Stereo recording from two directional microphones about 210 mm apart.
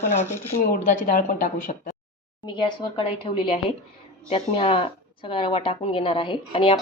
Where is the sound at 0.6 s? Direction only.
40° left (ahead or behind).